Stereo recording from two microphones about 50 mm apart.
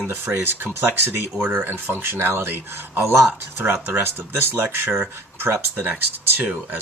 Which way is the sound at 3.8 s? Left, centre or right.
Right.